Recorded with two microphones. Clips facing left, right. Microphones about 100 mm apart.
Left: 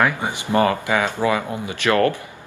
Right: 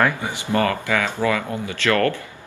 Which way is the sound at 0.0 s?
20° left (ahead or behind).